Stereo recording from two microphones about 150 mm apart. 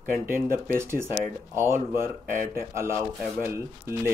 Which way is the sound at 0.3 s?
15° right (ahead or behind).